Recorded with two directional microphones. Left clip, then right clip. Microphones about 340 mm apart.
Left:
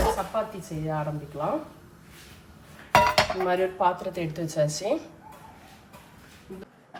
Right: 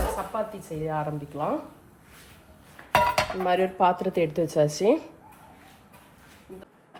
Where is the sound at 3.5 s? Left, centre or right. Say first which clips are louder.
Right 5 dB; right.